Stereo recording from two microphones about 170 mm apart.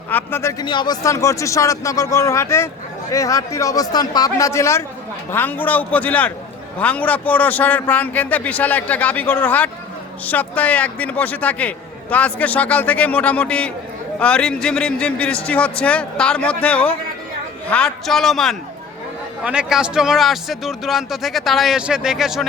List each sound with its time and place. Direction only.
0.1 s a man's voice: 10° left (ahead or behind)
0.6 s a man's voice: 25° left (ahead or behind); by 22.4 s centre (ahead or behind)